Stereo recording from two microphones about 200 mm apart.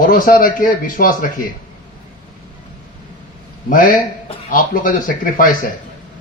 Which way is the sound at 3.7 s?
45° left (ahead or behind).